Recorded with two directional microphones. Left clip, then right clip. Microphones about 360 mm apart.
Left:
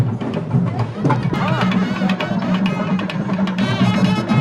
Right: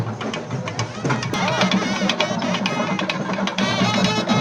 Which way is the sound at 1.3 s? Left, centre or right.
Right.